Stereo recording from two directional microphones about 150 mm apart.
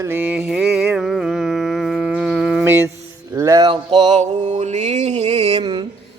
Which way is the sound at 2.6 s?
15° right (ahead or behind).